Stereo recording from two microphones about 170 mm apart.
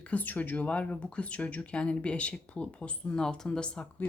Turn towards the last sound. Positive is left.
turn(degrees=5)  # may be behind; listen again after turning